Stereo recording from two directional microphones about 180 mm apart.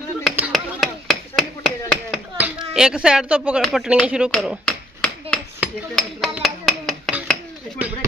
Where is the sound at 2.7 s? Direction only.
5° right (ahead or behind).